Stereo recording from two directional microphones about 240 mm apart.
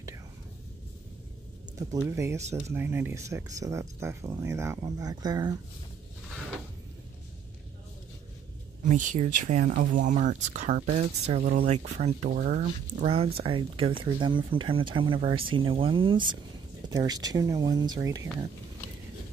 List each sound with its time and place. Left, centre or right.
1.8 s speech: centre
8.8 s speech: right; by 18.3 s centre